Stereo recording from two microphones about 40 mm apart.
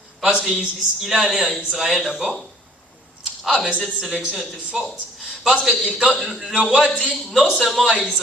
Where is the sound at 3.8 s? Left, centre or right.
Centre.